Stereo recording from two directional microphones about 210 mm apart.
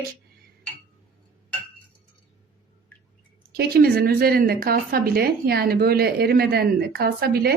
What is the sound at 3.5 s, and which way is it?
A woman's voice, 50° right (ahead or behind).